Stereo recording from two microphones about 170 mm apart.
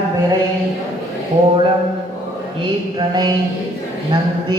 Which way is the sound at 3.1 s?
25° right (ahead or behind).